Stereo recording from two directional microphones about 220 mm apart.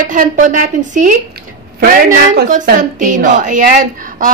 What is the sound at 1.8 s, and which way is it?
A woman's voice, 35° right (ahead or behind).